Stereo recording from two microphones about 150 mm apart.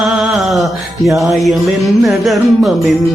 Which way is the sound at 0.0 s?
Centre (ahead or behind).